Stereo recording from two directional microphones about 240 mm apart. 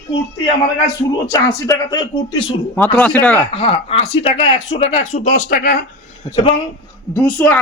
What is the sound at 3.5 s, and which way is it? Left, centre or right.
Speech, left.